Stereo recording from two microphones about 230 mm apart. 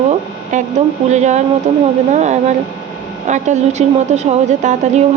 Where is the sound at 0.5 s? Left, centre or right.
Right.